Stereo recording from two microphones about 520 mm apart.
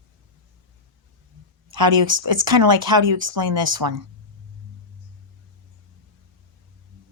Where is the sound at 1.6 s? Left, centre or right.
Right.